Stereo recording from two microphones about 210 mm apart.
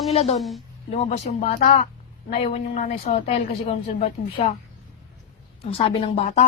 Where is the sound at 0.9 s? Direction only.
30° left (ahead or behind).